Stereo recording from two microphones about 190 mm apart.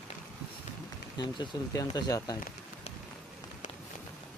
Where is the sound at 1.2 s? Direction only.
20° left (ahead or behind).